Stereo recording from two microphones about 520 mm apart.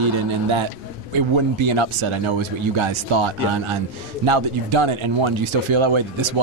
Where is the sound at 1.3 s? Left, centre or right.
Right.